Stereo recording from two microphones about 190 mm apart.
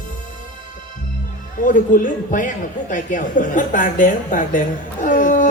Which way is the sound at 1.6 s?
45° left (ahead or behind).